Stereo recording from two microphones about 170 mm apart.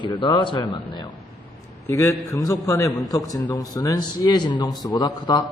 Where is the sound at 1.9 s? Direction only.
15° left (ahead or behind).